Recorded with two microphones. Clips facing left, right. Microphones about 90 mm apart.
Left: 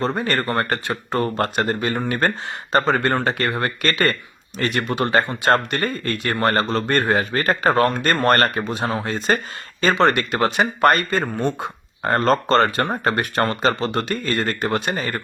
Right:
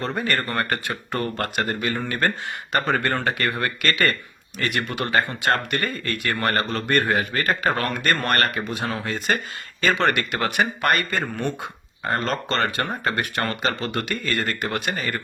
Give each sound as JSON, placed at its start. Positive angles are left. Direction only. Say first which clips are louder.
{"t": 0.0, "sound": "speech", "louder": "left 3 dB", "side_deg": 25}
{"t": 12.0, "sound": "speech", "louder": "left 7 dB", "side_deg": 45}